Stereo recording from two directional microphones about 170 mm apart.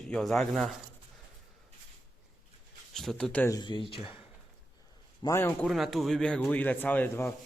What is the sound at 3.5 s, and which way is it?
Speech, 25° left (ahead or behind).